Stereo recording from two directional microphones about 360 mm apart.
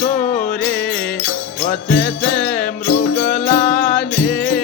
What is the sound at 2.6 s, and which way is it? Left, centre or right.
Music, left.